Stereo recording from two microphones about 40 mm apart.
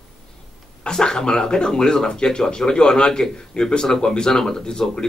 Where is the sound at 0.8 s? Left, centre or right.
Centre.